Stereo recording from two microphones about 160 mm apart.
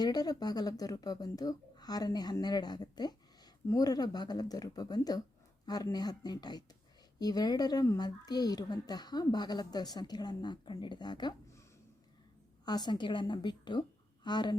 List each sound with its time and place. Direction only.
0.0 s speech: 25° left (ahead or behind)
12.6 s speech: 25° left (ahead or behind)